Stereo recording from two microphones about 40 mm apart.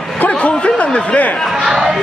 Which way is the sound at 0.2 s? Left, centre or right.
Left.